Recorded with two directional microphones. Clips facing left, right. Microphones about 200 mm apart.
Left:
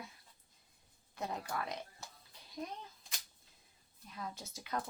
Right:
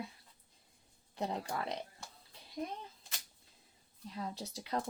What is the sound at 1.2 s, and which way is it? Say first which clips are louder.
Speech: right 3 dB; 30° right (ahead or behind).